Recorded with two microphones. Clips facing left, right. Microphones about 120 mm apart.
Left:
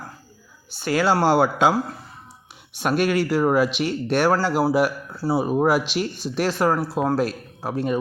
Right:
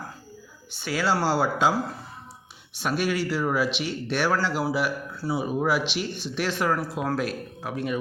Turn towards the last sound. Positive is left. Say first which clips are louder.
# left 5 dB
turn(degrees=35)  # may be behind; listen again after turning